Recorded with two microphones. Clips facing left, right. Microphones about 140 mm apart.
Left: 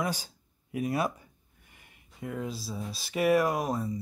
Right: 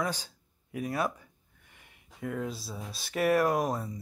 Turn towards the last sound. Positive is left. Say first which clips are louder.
# right 1 dB
turn(degrees=5)  # may be behind; listen again after turning